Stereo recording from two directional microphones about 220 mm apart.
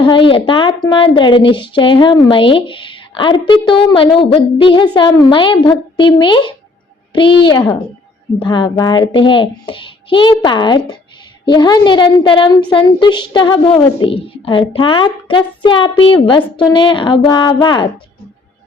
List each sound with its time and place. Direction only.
0.0 s a woman's voice: 20° left (ahead or behind)